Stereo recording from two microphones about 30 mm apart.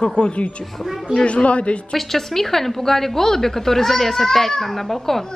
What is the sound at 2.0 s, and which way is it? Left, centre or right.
A woman's voice, centre.